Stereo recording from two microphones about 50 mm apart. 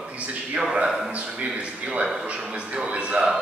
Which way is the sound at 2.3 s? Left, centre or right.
Right.